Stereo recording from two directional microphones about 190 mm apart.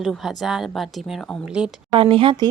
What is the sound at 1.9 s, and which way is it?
Speech, 25° right (ahead or behind).